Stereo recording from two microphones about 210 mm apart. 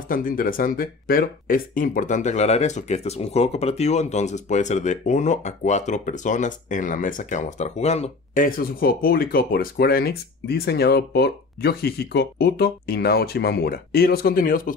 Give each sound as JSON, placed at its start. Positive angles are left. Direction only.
{"t": 0.1, "sound": "speech", "side_deg": 40}